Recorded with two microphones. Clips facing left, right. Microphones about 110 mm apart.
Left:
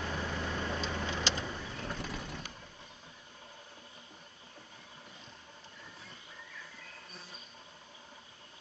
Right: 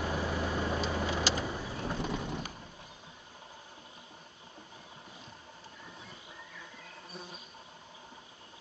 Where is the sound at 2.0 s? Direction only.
25° right (ahead or behind).